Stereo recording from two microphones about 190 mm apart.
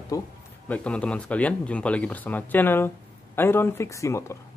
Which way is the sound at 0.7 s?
5° left (ahead or behind).